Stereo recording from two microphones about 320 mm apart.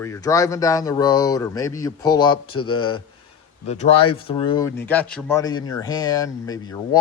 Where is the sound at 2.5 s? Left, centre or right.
Left.